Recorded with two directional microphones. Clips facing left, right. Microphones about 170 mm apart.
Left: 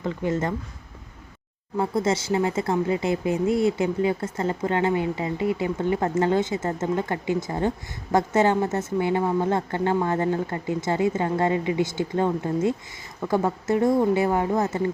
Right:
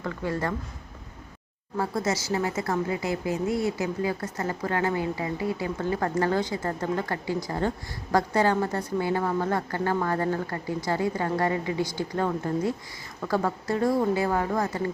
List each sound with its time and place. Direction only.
0.0 s a woman's voice: 20° left (ahead or behind)
1.8 s a woman's voice: 25° left (ahead or behind)